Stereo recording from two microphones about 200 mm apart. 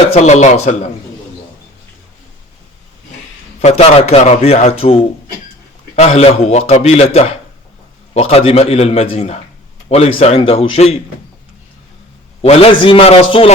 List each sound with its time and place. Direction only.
0.1 s a man's voice: 35° left (ahead or behind)
3.6 s a man's voice: 30° left (ahead or behind)
12.4 s speech: 30° left (ahead or behind)